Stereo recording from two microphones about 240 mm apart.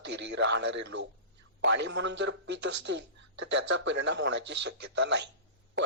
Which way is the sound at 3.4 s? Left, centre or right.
Right.